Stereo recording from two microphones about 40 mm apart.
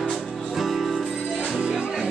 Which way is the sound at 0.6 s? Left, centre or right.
Centre.